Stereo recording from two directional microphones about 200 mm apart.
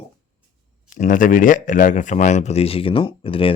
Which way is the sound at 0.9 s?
40° left (ahead or behind).